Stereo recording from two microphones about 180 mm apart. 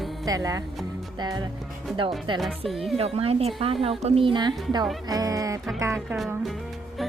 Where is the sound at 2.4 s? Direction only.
Centre (ahead or behind).